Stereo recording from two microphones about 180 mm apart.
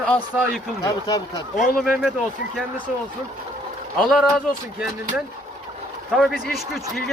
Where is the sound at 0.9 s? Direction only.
20° left (ahead or behind).